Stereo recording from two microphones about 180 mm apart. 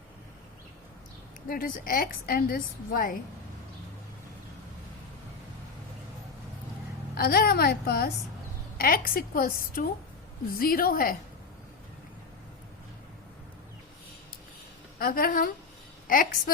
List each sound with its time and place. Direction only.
1.5 s a woman's voice: 50° left (ahead or behind)
7.2 s a woman's voice: 55° left (ahead or behind)
14.9 s a woman's voice: 55° left (ahead or behind)